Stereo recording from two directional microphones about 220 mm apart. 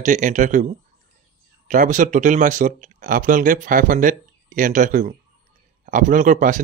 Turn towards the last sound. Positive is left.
turn(degrees=-35)  # may be behind; listen again after turning